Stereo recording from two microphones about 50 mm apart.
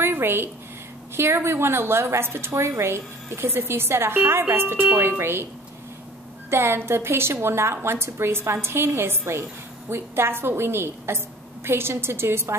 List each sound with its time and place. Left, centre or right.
0.0 s a sound: right
1.1 s a woman's voice: right
6.5 s a woman's voice: right